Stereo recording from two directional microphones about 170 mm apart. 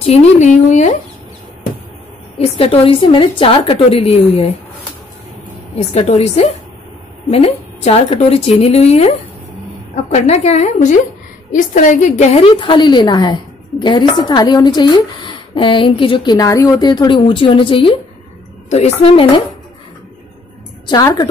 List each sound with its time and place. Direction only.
0.0 s a woman's voice: 40° left (ahead or behind)
2.3 s a woman's voice: 35° left (ahead or behind)
5.8 s a woman's voice: 40° left (ahead or behind)
10.1 s a woman's voice: 40° left (ahead or behind)
20.8 s a woman's voice: 20° left (ahead or behind)